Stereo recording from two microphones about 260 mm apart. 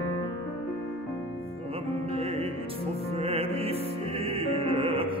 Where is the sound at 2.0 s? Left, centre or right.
Right.